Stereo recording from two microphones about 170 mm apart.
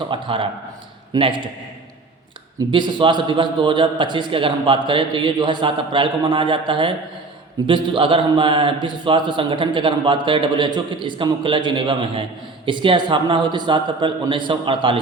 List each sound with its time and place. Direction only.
0.1 s a man's voice: 30° right (ahead or behind)
2.6 s a man's voice: 25° right (ahead or behind)